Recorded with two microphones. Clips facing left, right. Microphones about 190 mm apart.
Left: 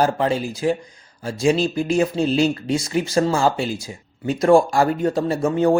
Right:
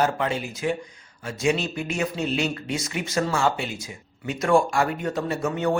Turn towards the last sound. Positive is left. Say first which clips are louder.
# left 6 dB
turn(degrees=30)  # may be behind; listen again after turning